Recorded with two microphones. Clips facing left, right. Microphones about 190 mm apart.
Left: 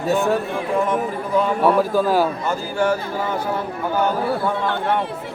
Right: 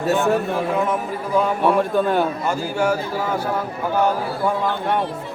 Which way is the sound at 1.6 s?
Centre (ahead or behind).